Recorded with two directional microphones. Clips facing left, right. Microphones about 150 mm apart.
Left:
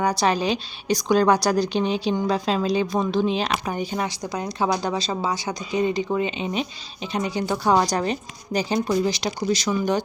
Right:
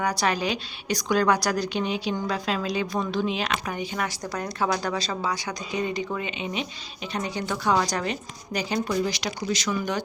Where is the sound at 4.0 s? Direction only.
20° left (ahead or behind).